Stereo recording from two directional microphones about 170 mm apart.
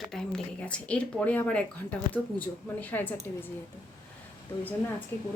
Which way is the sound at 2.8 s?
10° left (ahead or behind).